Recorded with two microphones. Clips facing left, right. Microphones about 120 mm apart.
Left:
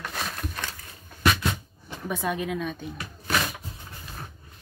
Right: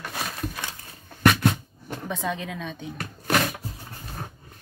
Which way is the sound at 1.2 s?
55° right (ahead or behind).